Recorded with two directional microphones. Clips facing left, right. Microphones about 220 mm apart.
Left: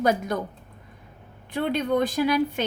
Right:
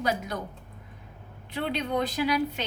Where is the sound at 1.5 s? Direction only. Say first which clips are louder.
Left 5 dB; 50° left (ahead or behind).